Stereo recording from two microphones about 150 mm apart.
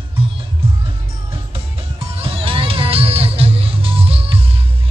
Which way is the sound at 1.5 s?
40° right (ahead or behind).